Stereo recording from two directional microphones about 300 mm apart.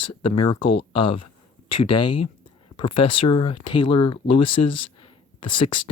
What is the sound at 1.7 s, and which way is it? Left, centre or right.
Speech, left.